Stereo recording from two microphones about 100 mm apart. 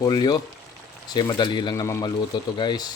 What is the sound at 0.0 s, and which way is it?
Speech, 45° left (ahead or behind).